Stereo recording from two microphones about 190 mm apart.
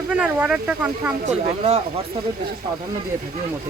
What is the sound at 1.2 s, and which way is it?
Speech, 35° right (ahead or behind).